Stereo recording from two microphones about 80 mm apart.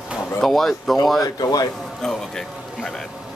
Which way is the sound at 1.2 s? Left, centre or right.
Left.